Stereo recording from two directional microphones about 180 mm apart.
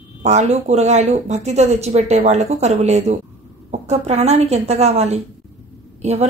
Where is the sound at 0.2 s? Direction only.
40° right (ahead or behind).